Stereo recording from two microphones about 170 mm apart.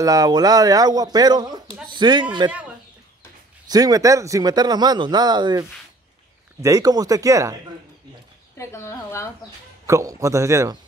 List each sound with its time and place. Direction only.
0.0 s speech: 20° right (ahead or behind)
3.6 s speech: 20° right (ahead or behind)
8.5 s a woman's voice: 15° left (ahead or behind)
9.8 s a man's voice: 20° right (ahead or behind)